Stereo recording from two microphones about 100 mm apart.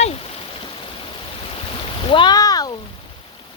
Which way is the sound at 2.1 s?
55° left (ahead or behind).